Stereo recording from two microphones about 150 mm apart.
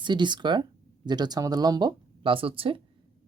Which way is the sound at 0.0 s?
30° right (ahead or behind).